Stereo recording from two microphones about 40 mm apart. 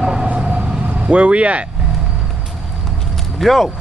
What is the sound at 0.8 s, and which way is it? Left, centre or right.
Speech, right.